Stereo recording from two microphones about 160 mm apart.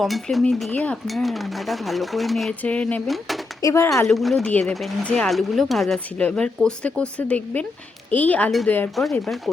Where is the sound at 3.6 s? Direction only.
15° left (ahead or behind).